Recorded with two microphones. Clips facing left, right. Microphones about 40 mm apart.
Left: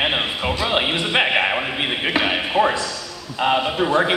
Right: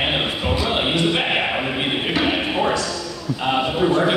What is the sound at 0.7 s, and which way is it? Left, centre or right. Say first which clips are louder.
Speech: right 2 dB; left.